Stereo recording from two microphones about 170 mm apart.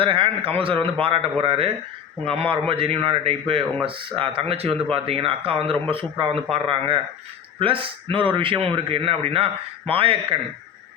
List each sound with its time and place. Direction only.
0.0 s a man's voice: 30° right (ahead or behind)